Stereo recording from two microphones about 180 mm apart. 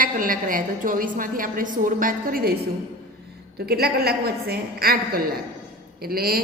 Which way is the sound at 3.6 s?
60° right (ahead or behind).